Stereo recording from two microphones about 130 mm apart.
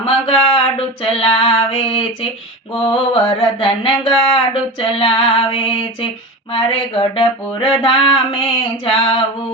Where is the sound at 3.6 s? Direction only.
40° left (ahead or behind).